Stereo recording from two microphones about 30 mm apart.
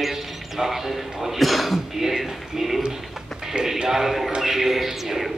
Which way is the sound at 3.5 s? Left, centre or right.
Right.